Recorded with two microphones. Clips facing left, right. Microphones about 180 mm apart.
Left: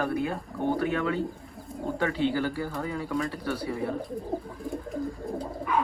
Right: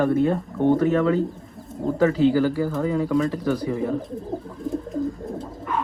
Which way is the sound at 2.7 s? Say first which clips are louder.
Right 9 dB; centre (ahead or behind).